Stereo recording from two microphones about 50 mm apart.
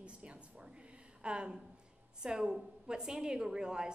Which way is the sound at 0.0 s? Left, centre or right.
Right.